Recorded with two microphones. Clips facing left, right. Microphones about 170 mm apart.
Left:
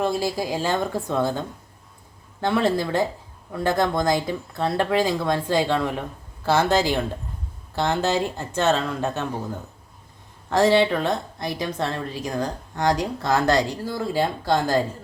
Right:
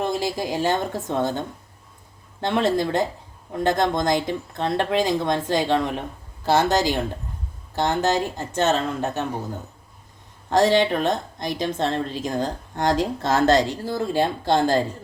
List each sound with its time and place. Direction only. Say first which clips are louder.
0.0 s a woman's voice: left 1 dB; 20° right (ahead or behind)
10.5 s a woman's voice: even; 20° right (ahead or behind)